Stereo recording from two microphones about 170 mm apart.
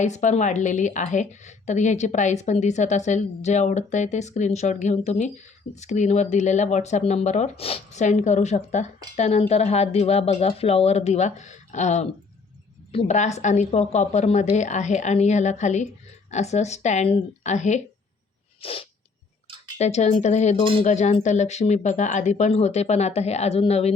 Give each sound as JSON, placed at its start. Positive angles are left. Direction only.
{"t": 0.0, "sound": "a woman's voice", "side_deg": 45}